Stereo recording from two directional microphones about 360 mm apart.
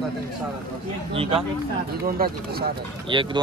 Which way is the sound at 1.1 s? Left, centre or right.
Centre.